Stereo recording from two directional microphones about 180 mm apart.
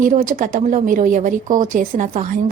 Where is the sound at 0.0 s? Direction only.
45° right (ahead or behind).